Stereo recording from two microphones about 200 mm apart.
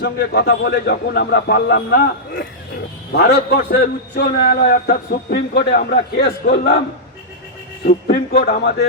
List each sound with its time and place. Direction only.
0.0 s a man's voice: 55° left (ahead or behind)
7.9 s a man's voice: 50° left (ahead or behind)